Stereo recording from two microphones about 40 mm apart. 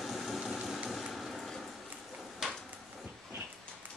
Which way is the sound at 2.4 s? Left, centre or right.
Centre.